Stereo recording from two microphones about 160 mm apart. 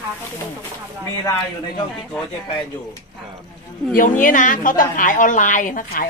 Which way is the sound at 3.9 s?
55° left (ahead or behind).